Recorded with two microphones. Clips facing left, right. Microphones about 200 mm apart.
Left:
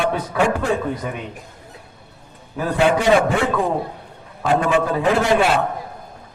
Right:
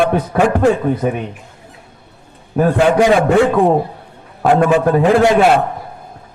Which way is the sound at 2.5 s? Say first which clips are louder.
Right 6 dB; 70° right (ahead or behind).